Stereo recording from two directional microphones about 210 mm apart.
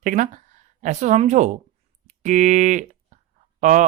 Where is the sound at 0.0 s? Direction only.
40° right (ahead or behind).